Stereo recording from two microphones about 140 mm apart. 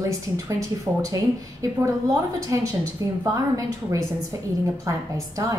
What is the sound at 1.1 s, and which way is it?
A woman's voice, 20° right (ahead or behind).